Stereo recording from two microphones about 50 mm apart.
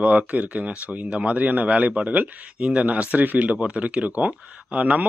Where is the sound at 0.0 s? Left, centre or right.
Right.